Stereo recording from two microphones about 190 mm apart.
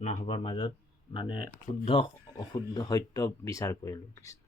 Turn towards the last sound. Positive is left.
turn(degrees=20)  # may be behind; listen again after turning